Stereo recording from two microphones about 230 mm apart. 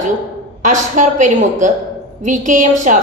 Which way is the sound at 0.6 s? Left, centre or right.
Right.